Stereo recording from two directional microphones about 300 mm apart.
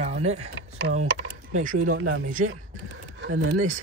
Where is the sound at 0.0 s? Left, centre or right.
Right.